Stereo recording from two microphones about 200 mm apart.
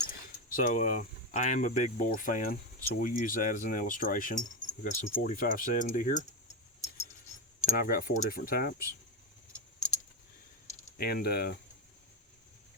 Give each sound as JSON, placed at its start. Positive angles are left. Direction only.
{"t": 0.1, "sound": "speech", "side_deg": 40}
{"t": 7.6, "sound": "speech", "side_deg": 45}
{"t": 10.9, "sound": "speech", "side_deg": 50}